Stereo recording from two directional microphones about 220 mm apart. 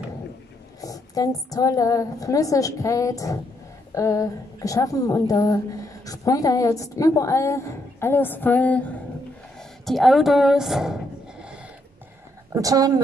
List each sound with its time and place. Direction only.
0.7 s a woman's voice: 15° left (ahead or behind); by 11.0 s centre (ahead or behind)
12.5 s a woman's voice: 15° right (ahead or behind)